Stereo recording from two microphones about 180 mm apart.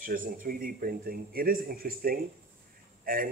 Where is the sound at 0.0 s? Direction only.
50° right (ahead or behind).